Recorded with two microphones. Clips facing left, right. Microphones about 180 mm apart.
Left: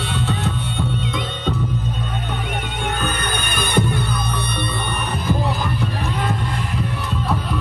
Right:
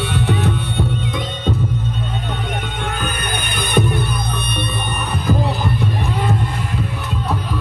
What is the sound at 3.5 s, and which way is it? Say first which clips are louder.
Music: right 2 dB; 15° right (ahead or behind).